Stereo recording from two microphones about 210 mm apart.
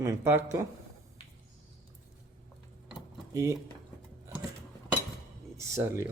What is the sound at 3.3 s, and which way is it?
Speech, 15° right (ahead or behind).